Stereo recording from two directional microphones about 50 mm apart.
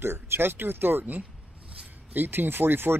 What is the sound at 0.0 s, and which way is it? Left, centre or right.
Speech, right.